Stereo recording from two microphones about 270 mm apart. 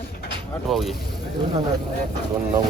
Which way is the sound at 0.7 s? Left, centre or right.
Centre.